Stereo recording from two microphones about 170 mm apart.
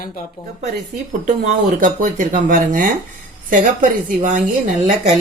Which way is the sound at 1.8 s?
50° right (ahead or behind).